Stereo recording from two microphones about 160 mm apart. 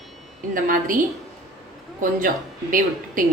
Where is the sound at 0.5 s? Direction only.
60° right (ahead or behind).